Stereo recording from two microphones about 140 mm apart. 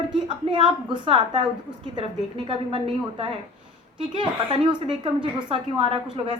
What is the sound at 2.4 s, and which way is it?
A woman's voice, 40° right (ahead or behind).